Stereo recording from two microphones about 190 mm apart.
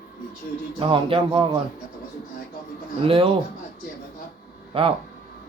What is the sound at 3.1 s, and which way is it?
Speech, 30° right (ahead or behind).